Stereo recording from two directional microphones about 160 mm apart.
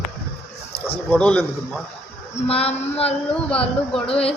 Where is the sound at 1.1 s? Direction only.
5° left (ahead or behind).